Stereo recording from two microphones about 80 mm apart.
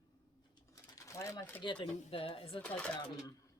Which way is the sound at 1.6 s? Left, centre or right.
Left.